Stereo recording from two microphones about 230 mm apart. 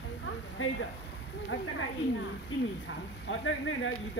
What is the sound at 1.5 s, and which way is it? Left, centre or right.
Speech, left.